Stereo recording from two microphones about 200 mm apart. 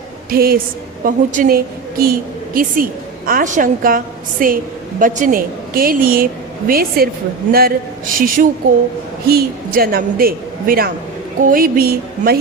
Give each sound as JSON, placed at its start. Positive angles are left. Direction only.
{"t": 0.3, "sound": "a woman's voice", "side_deg": -50}
{"t": 3.2, "sound": "a woman's voice", "side_deg": -40}